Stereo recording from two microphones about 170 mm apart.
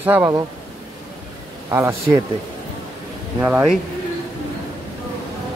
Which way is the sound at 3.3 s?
15° right (ahead or behind).